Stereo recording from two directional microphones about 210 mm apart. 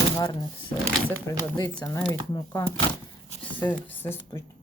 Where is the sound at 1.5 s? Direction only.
15° left (ahead or behind).